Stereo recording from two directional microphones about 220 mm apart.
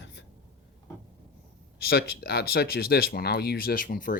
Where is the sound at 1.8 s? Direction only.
45° left (ahead or behind).